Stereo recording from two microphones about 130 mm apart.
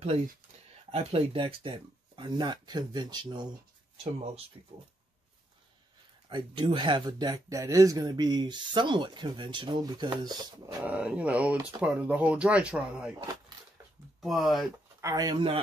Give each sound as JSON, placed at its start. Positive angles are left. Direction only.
{"t": 0.9, "sound": "speech", "side_deg": -45}
{"t": 3.9, "sound": "speech", "side_deg": -45}
{"t": 6.2, "sound": "speech", "side_deg": -35}
{"t": 10.8, "sound": "speech", "side_deg": -10}
{"t": 14.2, "sound": "speech", "side_deg": 0}
{"t": 15.0, "sound": "speech", "side_deg": -25}